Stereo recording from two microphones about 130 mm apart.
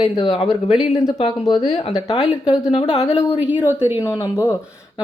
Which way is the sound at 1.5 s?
30° left (ahead or behind).